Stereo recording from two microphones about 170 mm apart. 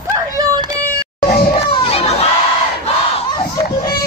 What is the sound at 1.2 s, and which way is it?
Crowd, 30° left (ahead or behind).